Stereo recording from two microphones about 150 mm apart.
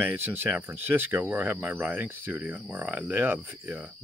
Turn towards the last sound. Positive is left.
turn(degrees=-10)  # may be behind; listen again after turning